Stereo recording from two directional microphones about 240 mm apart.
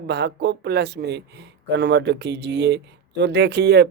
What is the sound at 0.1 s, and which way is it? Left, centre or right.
Speech, right.